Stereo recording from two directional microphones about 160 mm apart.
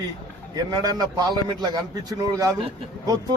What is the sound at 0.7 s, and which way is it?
A man's voice, 25° right (ahead or behind).